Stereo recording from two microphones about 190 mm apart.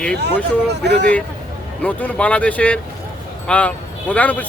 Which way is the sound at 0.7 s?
60° right (ahead or behind).